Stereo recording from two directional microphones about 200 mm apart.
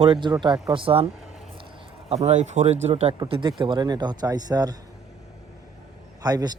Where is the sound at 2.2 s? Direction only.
35° right (ahead or behind); by 4.7 s 20° right (ahead or behind).